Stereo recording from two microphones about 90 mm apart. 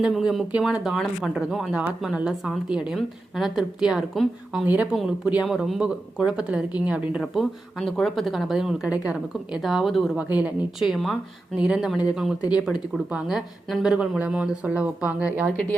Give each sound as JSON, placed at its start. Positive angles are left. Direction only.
{"t": 0.1, "sound": "speech", "side_deg": 0}
{"t": 4.6, "sound": "speech", "side_deg": -15}
{"t": 7.2, "sound": "speech", "side_deg": 0}
{"t": 10.2, "sound": "speech", "side_deg": -15}
{"t": 10.8, "sound": "speech", "side_deg": 0}
{"t": 11.5, "sound": "speech", "side_deg": -10}